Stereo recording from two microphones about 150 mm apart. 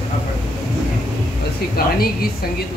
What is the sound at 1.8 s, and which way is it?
Speech, 90° left.